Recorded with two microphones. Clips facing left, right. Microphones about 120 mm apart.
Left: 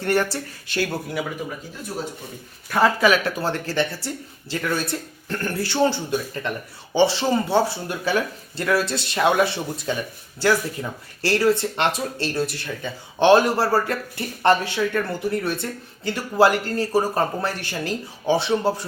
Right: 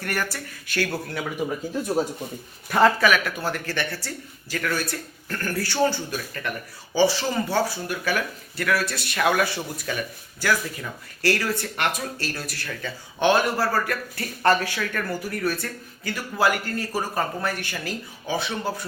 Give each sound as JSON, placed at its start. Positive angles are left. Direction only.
{"t": 0.0, "sound": "speech", "side_deg": 25}
{"t": 0.8, "sound": "speech", "side_deg": 10}
{"t": 2.6, "sound": "speech", "side_deg": 0}
{"t": 3.0, "sound": "speech", "side_deg": 30}